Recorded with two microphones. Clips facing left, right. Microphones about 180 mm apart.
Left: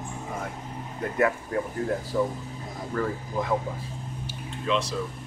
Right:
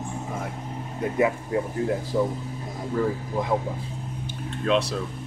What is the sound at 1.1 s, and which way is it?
Speech, 15° right (ahead or behind).